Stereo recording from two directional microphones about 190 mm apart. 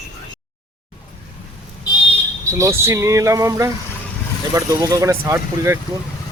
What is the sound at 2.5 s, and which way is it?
Speech, 15° right (ahead or behind).